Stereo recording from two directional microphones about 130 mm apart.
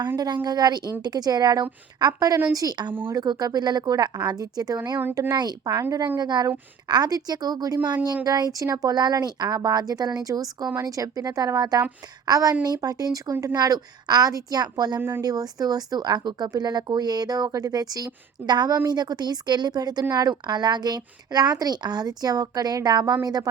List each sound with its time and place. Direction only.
0.4 s a woman's voice: 30° right (ahead or behind)